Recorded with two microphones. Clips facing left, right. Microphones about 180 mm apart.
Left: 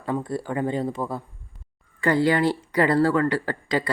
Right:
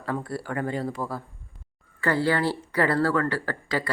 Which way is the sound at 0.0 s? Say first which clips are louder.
Left 3 dB; 20° left (ahead or behind).